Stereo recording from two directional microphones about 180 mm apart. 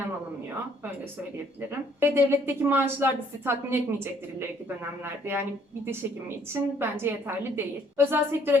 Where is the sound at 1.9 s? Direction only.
15° right (ahead or behind).